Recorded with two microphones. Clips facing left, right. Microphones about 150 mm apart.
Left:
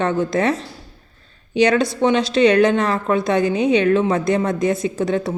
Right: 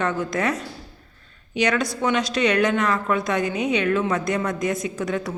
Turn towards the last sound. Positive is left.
turn(degrees=30)  # may be behind; listen again after turning